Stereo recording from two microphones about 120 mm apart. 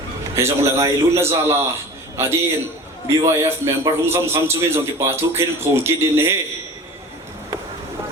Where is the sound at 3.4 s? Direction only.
25° right (ahead or behind).